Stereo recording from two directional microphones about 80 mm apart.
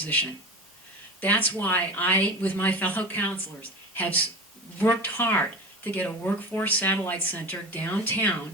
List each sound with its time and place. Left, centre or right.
1.2 s speech: centre